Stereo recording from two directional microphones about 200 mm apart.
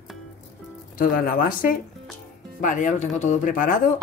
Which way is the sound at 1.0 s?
45° left (ahead or behind).